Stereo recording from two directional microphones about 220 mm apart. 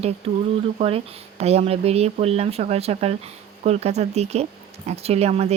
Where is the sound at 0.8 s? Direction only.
25° right (ahead or behind).